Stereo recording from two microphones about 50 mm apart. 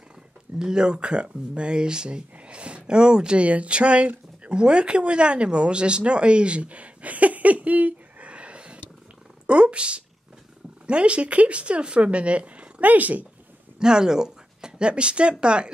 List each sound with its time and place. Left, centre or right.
0.6 s speech: centre; by 13.3 s right
13.7 s speech: centre